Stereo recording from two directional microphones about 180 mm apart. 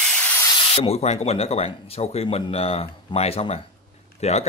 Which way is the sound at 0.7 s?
35° left (ahead or behind).